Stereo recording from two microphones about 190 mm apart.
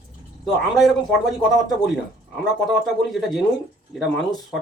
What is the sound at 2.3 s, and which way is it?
Speech, centre (ahead or behind).